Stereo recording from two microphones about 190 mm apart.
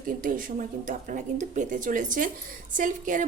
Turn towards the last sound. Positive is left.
turn(degrees=-45)  # may be behind; listen again after turning